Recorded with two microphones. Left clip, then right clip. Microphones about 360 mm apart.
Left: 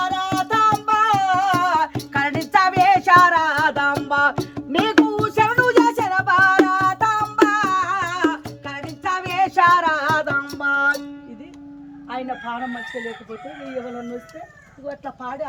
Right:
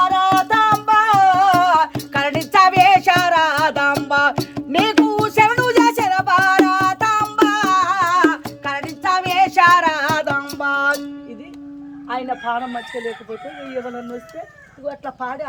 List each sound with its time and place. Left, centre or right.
0.0 s music: centre; by 11.0 s right
12.0 s music: centre